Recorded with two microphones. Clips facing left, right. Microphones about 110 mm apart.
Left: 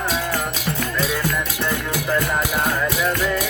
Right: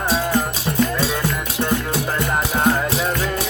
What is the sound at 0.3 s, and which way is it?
Music, 25° right (ahead or behind).